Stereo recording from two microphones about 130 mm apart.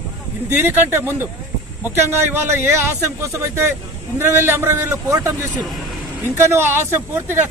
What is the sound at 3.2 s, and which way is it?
A man's voice, 20° right (ahead or behind).